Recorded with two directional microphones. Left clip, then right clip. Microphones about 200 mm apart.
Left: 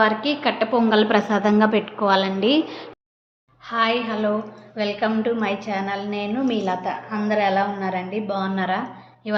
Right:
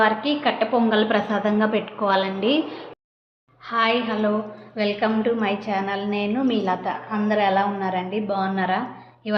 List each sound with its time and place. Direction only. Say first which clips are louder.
0.0 s a woman's voice: even; 25° left (ahead or behind)
3.7 s a woman's voice: even; centre (ahead or behind)